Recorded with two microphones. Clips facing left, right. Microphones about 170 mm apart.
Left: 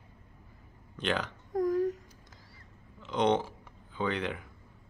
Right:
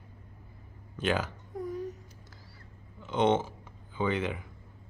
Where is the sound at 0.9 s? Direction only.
5° right (ahead or behind).